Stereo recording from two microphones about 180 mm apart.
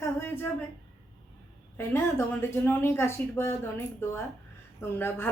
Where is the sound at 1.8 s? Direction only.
15° left (ahead or behind).